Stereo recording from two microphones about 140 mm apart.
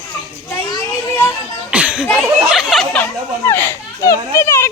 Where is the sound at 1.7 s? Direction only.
10° right (ahead or behind).